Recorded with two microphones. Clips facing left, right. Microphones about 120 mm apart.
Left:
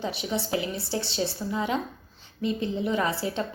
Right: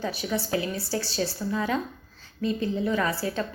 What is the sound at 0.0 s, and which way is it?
A woman's voice, 20° left (ahead or behind).